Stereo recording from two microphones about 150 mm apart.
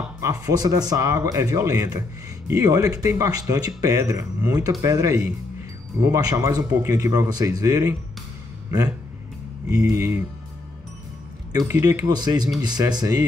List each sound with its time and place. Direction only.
0.2 s speech: 20° right (ahead or behind)
9.7 s speech: 20° right (ahead or behind)
11.5 s speech: 25° right (ahead or behind)